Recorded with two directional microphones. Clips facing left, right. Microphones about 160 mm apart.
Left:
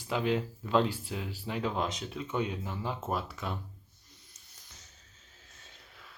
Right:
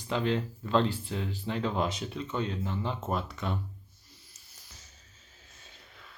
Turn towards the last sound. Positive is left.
turn(degrees=0)  # may be behind; listen again after turning